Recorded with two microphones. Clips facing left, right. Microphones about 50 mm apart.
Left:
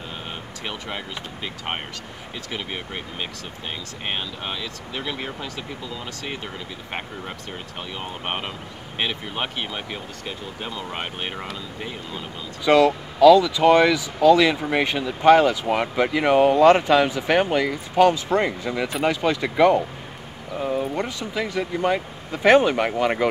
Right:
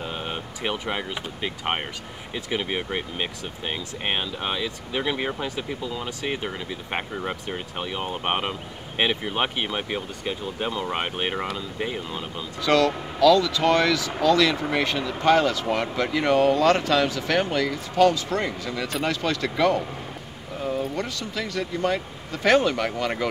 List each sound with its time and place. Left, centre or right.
0.0 s speech: centre
12.6 s speech: centre